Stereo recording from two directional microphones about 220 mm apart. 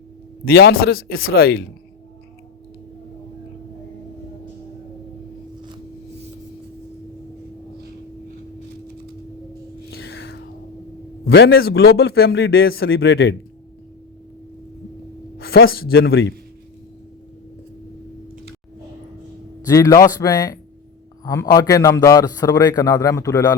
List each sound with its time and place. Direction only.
0.4 s a man's voice: 45° left (ahead or behind)
9.9 s a sound: 45° left (ahead or behind)
11.3 s a man's voice: 45° left (ahead or behind)
15.4 s a man's voice: 45° left (ahead or behind)
19.6 s a man's voice: 15° left (ahead or behind)